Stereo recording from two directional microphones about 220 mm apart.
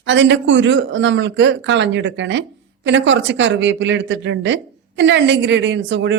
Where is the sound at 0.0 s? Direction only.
55° right (ahead or behind).